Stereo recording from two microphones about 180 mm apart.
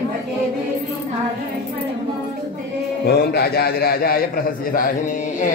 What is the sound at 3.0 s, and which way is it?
A man's voice, 60° left (ahead or behind).